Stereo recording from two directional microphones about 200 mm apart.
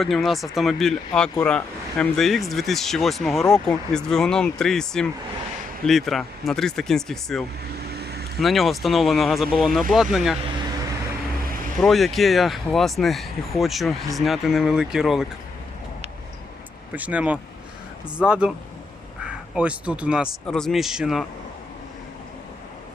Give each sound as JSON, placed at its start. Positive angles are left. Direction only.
{"t": 0.0, "sound": "speech", "side_deg": 0}
{"t": 7.8, "sound": "vehicle", "side_deg": -55}
{"t": 8.4, "sound": "speech", "side_deg": 0}
{"t": 11.8, "sound": "speech", "side_deg": 0}
{"t": 16.9, "sound": "speech", "side_deg": -5}